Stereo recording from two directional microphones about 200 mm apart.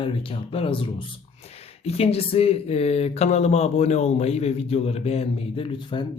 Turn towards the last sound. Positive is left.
turn(degrees=30)  # may be behind; listen again after turning